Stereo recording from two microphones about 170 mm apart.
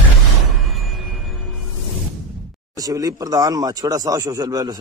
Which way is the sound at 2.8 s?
20° right (ahead or behind).